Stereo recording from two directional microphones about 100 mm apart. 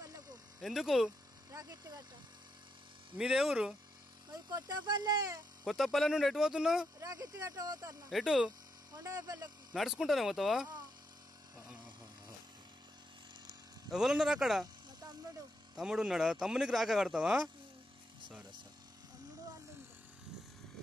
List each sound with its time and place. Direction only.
0.0 s a sound: 40° right (ahead or behind)
0.6 s speech: centre (ahead or behind)
1.5 s speech: 40° right (ahead or behind)
3.2 s speech: 5° right (ahead or behind)
4.3 s speech: 40° right (ahead or behind)
5.7 s speech: centre (ahead or behind)
7.0 s speech: 35° right (ahead or behind)
8.1 s speech: 5° right (ahead or behind)
8.9 s speech: 35° right (ahead or behind)
9.7 s speech: 5° right (ahead or behind)
11.5 s a sound: 10° right (ahead or behind)
13.9 s speech: 5° right (ahead or behind)
15.7 s speech: 5° right (ahead or behind)